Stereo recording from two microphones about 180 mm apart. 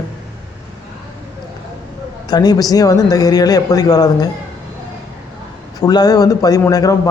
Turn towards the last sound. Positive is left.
turn(degrees=20)  # may be behind; listen again after turning